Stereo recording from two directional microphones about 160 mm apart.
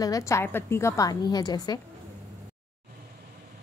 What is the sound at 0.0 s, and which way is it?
A woman's voice, 20° left (ahead or behind).